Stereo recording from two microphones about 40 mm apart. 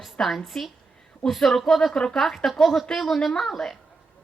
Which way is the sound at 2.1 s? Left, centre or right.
Centre.